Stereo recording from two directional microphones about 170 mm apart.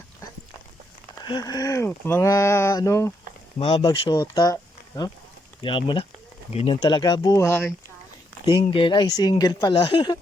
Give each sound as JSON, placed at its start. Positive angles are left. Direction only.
{"t": 1.2, "sound": "speech", "side_deg": 25}
{"t": 3.6, "sound": "speech", "side_deg": 35}
{"t": 3.8, "sound": "speech", "side_deg": 20}
{"t": 6.8, "sound": "speech", "side_deg": 25}
{"t": 8.4, "sound": "speech", "side_deg": 30}